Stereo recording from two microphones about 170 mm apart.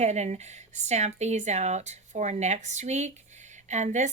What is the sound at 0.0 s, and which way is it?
A woman's voice, 40° right (ahead or behind).